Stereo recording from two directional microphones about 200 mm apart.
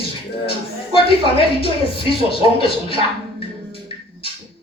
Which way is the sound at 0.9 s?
25° left (ahead or behind).